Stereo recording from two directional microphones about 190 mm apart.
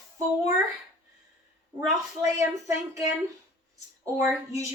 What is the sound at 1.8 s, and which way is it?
Speech, 15° right (ahead or behind).